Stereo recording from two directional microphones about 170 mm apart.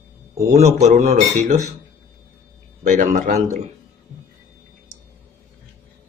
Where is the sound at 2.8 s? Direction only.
45° right (ahead or behind).